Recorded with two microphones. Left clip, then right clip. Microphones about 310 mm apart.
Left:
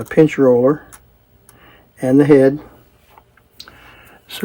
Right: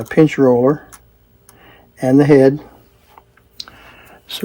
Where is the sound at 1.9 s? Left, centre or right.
Centre.